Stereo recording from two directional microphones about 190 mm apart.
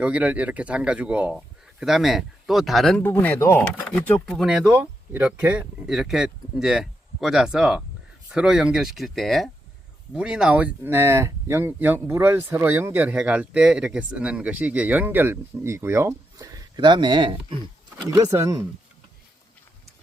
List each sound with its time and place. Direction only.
0.0 s speech: 10° right (ahead or behind); by 17.6 s 25° right (ahead or behind)
18.3 s speech: 15° right (ahead or behind)